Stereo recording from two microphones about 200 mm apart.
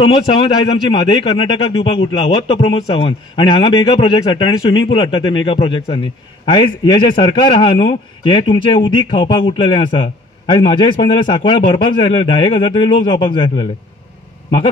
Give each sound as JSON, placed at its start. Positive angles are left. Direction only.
{"t": 0.8, "sound": "a man's voice", "side_deg": 25}